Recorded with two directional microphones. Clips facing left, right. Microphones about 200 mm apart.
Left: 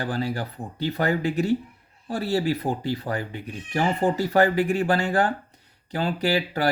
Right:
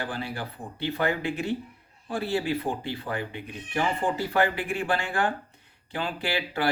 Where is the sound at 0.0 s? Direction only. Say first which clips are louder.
Left 5 dB; 40° left (ahead or behind).